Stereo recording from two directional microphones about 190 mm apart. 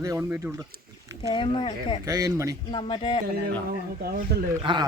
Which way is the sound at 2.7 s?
25° left (ahead or behind).